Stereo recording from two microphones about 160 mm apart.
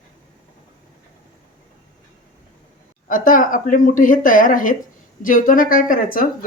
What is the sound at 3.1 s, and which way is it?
A woman's voice, 60° left (ahead or behind).